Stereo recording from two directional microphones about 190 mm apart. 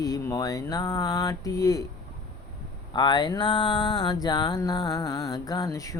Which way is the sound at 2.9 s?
25° left (ahead or behind).